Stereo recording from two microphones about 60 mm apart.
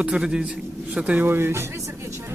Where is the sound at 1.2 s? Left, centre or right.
Right.